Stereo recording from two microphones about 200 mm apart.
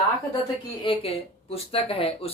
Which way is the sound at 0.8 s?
30° left (ahead or behind).